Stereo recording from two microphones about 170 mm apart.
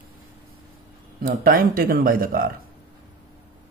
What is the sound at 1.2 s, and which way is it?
Speech, 55° right (ahead or behind).